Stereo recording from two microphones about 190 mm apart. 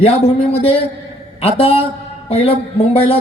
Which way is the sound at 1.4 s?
30° left (ahead or behind).